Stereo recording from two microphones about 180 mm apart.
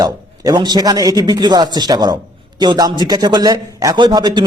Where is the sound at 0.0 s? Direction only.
20° right (ahead or behind).